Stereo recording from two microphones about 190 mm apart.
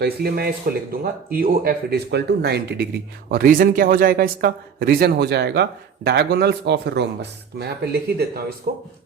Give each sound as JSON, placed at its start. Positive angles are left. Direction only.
{"t": 0.0, "sound": "speech", "side_deg": -55}